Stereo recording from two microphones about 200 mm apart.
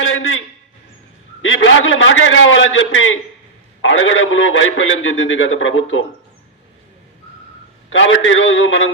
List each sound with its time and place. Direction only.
0.0 s a sound: 80° left
1.4 s a man's voice: 75° left (ahead or behind)
7.9 s a man's voice: 70° left (ahead or behind)